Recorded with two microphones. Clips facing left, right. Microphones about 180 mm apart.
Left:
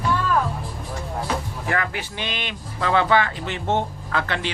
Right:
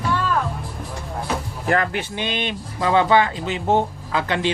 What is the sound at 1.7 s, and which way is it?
Speech, 20° right (ahead or behind).